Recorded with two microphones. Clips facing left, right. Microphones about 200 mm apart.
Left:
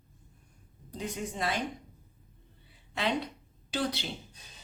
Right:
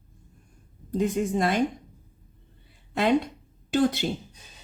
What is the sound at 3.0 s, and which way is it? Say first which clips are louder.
A woman's voice: right 9 dB; 50° right (ahead or behind).